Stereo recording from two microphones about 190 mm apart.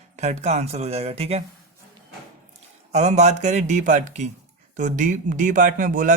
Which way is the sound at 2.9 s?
35° right (ahead or behind).